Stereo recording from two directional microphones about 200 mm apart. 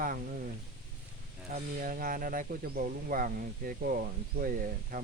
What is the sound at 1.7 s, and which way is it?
Speech, 45° right (ahead or behind).